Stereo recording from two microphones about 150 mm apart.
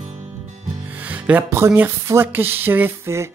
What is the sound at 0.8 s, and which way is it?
Speech, 10° right (ahead or behind).